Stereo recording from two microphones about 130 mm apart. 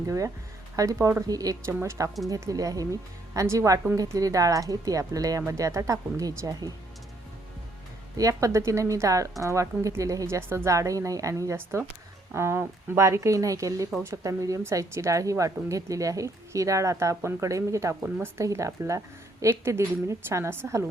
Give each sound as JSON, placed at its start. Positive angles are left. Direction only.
{"t": 0.8, "sound": "speech", "side_deg": -25}
{"t": 8.1, "sound": "speech", "side_deg": -25}